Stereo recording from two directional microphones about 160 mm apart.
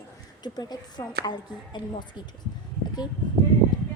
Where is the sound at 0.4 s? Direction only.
25° left (ahead or behind).